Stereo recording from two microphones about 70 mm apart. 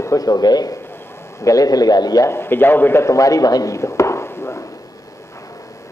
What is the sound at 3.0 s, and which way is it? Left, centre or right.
Speech, left.